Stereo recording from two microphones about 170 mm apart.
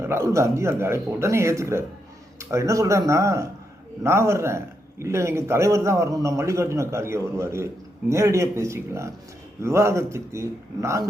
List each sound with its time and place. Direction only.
0.0 s a man's voice: 15° right (ahead or behind)